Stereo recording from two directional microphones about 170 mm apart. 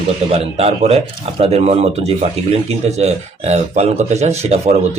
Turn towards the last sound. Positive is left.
turn(degrees=-40)  # may be behind; listen again after turning